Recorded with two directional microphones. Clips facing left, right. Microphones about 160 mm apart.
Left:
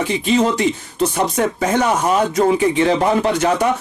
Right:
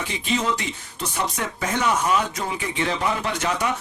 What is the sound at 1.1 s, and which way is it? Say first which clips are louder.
Speech: left 9 dB; 40° left (ahead or behind).